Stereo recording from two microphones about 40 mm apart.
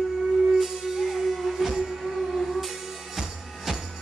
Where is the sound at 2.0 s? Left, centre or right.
Centre.